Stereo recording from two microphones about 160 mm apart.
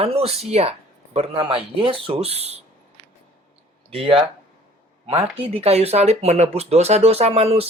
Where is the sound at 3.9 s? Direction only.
35° right (ahead or behind).